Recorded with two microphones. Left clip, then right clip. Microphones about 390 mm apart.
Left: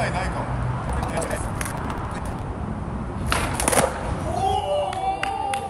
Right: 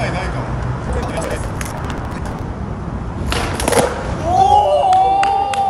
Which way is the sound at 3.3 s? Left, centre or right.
Centre.